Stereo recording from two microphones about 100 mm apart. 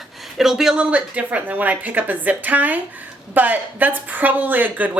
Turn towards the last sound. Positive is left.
turn(degrees=-15)  # may be behind; listen again after turning